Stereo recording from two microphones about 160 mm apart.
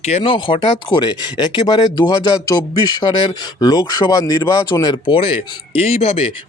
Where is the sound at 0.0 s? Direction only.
40° left (ahead or behind).